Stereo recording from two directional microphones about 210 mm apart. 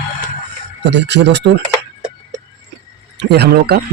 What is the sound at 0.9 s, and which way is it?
Speech, 55° right (ahead or behind).